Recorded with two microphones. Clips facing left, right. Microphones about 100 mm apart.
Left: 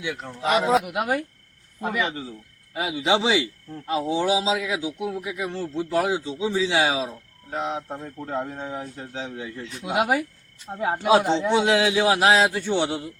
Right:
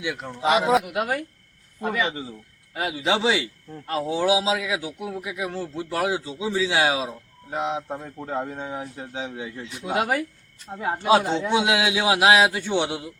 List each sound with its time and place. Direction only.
0.0 s a man's voice: 5° right (ahead or behind)
0.9 s speech: 20° left (ahead or behind)
2.0 s a man's voice: 5° right (ahead or behind)
7.5 s a man's voice: 15° right (ahead or behind)
9.8 s a man's voice: 15° left (ahead or behind); by 13.1 s 5° right (ahead or behind)